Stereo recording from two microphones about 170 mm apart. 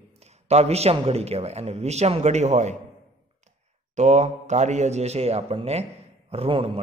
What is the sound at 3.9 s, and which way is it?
A man's voice, 40° right (ahead or behind).